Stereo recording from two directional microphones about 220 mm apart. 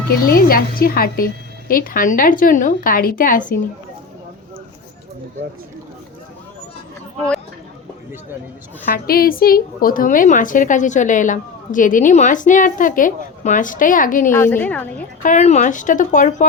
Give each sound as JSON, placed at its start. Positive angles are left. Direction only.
{"t": 0.3, "sound": "a woman's voice", "side_deg": 40}
{"t": 8.9, "sound": "a woman's voice", "side_deg": 40}
{"t": 14.3, "sound": "a woman's voice", "side_deg": 10}
{"t": 15.2, "sound": "a woman's voice", "side_deg": 35}